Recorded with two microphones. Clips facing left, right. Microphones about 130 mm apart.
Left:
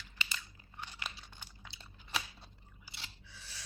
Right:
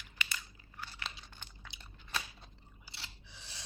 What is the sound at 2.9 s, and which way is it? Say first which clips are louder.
Scissors: even; 20° right (ahead or behind).